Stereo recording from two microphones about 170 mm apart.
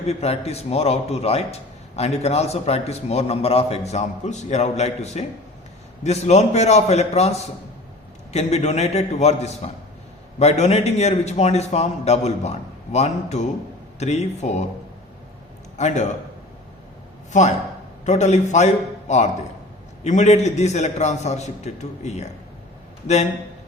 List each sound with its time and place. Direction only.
0.1 s a man's voice: 40° left (ahead or behind)
15.8 s a man's voice: 45° left (ahead or behind)
18.0 s a man's voice: 40° left (ahead or behind)